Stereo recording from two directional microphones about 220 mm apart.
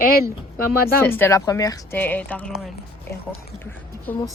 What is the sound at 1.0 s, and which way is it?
Speech, 10° left (ahead or behind).